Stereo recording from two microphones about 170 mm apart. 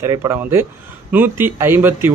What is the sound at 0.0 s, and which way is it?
Speech, 15° right (ahead or behind).